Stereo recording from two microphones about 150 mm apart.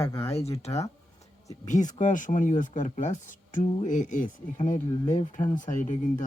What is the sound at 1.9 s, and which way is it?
Speech, 55° left (ahead or behind).